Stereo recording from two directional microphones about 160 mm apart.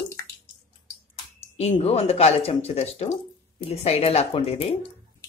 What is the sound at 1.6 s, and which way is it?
Speech, 40° left (ahead or behind).